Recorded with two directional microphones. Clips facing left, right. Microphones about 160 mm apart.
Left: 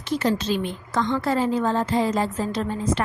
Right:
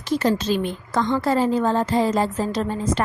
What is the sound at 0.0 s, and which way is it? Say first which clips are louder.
A woman's voice: right 2 dB; 45° right (ahead or behind).